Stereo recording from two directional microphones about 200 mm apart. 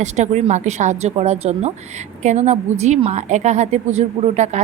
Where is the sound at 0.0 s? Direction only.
35° right (ahead or behind).